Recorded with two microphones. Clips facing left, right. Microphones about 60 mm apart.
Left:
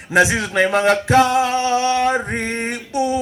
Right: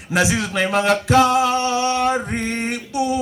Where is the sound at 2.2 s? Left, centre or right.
Left.